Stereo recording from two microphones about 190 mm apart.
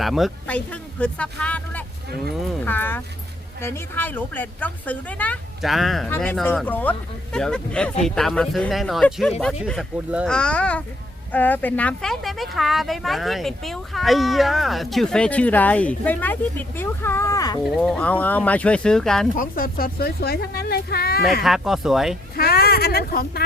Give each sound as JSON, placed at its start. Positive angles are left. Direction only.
{"t": 0.0, "sound": "speech", "side_deg": 0}
{"t": 6.1, "sound": "speech", "side_deg": 10}
{"t": 17.7, "sound": "speech", "side_deg": 0}
{"t": 19.4, "sound": "speech", "side_deg": 50}
{"t": 21.4, "sound": "speech", "side_deg": 0}
{"t": 22.4, "sound": "speech", "side_deg": 55}